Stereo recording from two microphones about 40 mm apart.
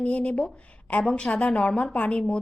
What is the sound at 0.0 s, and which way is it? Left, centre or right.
A woman's voice, left.